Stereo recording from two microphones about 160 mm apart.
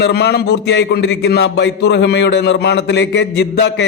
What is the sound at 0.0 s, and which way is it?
A man's voice, 90° left.